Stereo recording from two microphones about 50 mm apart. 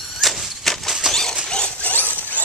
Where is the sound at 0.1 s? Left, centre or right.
Centre.